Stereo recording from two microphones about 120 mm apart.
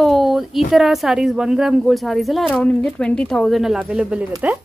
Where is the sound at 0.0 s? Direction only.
Centre (ahead or behind).